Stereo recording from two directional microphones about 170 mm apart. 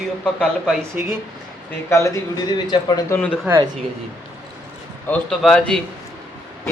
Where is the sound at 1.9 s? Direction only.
20° left (ahead or behind).